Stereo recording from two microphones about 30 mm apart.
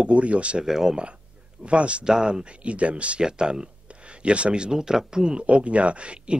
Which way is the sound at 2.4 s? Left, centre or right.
Right.